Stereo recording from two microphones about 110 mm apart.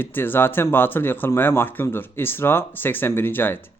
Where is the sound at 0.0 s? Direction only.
20° left (ahead or behind).